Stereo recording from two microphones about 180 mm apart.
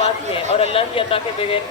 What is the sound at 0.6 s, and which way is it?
Speech, 30° left (ahead or behind).